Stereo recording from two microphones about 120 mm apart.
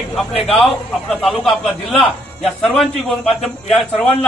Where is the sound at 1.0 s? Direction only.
5° left (ahead or behind).